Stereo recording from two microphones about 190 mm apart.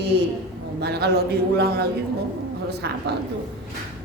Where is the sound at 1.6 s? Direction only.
55° right (ahead or behind).